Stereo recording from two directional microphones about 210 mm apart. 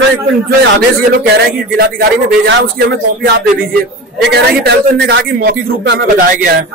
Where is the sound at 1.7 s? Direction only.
50° right (ahead or behind).